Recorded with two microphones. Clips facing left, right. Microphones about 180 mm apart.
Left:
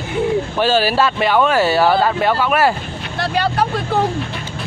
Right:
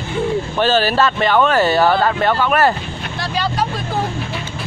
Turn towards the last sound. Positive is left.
turn(degrees=60)  # may be behind; listen again after turning